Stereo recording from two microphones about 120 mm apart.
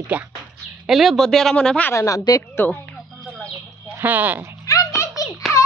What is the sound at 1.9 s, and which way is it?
Speech, 25° left (ahead or behind).